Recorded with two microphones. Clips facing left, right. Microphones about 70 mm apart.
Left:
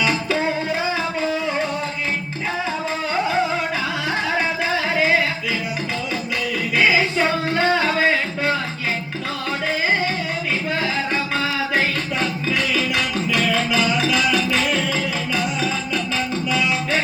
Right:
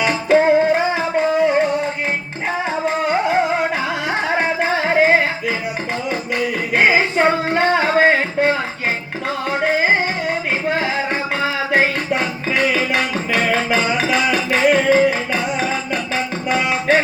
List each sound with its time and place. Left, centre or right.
0.0 s music: right
2.8 s music: right
6.7 s music: right
9.6 s music: right
12.2 s music: right